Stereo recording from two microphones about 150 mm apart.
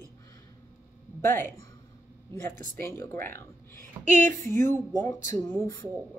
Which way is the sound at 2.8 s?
20° left (ahead or behind).